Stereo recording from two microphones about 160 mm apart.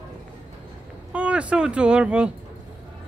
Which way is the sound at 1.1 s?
10° right (ahead or behind).